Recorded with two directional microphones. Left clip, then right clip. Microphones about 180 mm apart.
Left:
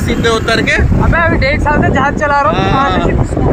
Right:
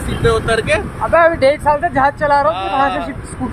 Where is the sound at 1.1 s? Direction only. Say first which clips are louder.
Right 2 dB; 45° right (ahead or behind).